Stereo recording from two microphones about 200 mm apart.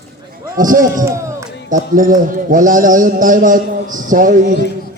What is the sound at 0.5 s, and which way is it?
A man's voice, 40° right (ahead or behind).